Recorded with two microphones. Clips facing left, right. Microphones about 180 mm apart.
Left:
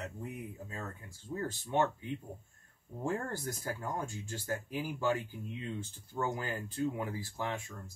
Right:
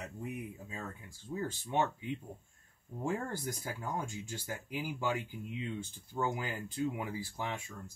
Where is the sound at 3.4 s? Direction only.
10° right (ahead or behind).